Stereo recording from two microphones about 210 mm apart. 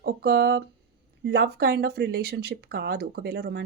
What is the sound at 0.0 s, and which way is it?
Speech, 50° right (ahead or behind).